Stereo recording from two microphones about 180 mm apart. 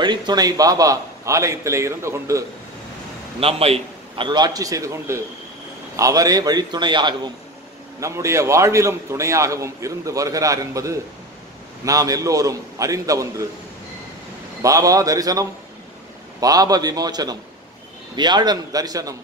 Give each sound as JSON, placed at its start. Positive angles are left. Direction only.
{"t": 0.0, "sound": "a man's voice", "side_deg": -25}
{"t": 3.3, "sound": "a man's voice", "side_deg": -35}
{"t": 14.6, "sound": "a man's voice", "side_deg": -20}